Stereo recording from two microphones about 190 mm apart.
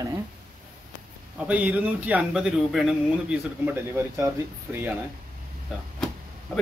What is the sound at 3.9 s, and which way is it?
Speech, 15° right (ahead or behind).